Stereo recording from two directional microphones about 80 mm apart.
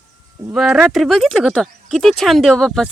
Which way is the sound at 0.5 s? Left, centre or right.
Centre.